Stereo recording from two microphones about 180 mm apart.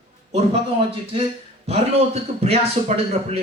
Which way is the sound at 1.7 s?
35° right (ahead or behind).